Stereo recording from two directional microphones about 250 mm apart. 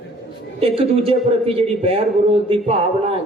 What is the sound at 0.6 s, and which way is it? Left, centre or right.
A man's voice, right.